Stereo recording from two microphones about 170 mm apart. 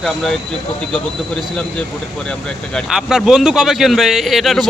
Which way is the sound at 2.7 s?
Centre (ahead or behind).